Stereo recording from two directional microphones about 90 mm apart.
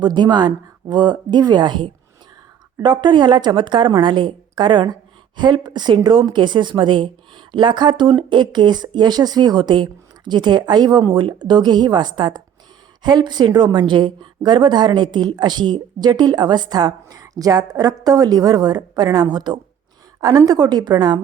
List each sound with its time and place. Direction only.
0.0 s a woman's voice: 55° right (ahead or behind)